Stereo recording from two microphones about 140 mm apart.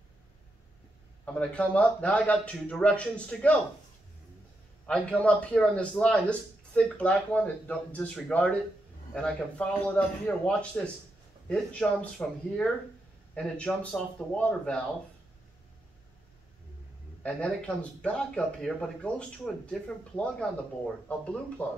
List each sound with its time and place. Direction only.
1.2 s speech: 5° left (ahead or behind)
4.8 s speech: 10° left (ahead or behind)
17.2 s speech: 10° left (ahead or behind)
21.6 s speech: 15° left (ahead or behind)